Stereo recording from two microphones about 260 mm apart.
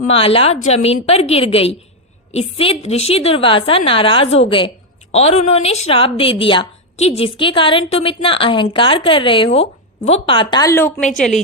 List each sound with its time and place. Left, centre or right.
0.1 s a woman's voice: left